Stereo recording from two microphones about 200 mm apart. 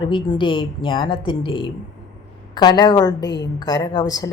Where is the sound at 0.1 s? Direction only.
25° left (ahead or behind).